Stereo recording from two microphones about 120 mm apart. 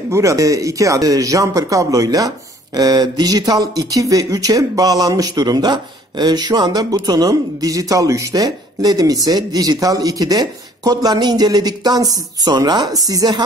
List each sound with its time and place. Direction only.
0.1 s speech: 25° right (ahead or behind)